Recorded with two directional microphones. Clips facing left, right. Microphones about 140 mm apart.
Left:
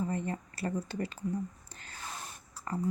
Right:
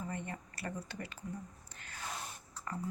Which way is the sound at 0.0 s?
35° left (ahead or behind).